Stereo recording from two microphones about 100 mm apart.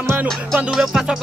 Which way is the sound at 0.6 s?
5° right (ahead or behind).